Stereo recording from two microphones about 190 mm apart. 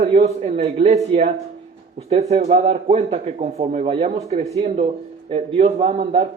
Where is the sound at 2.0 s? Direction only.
30° right (ahead or behind).